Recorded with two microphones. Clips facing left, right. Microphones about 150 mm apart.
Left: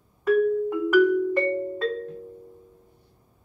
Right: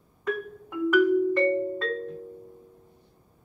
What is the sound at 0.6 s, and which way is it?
Music, 5° left (ahead or behind).